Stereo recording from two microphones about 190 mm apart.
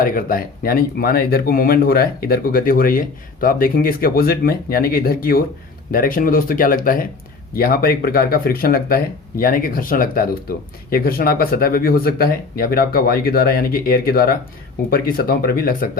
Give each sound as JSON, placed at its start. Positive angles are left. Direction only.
{"t": 0.0, "sound": "speech", "side_deg": 50}